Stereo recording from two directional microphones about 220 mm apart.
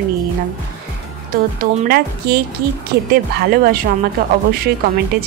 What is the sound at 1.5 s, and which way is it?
Speech, 40° right (ahead or behind).